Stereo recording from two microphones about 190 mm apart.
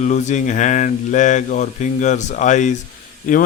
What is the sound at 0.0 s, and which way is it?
A man's voice, 40° left (ahead or behind).